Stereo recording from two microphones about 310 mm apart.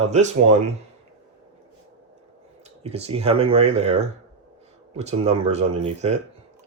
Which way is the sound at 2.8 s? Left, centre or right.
Centre.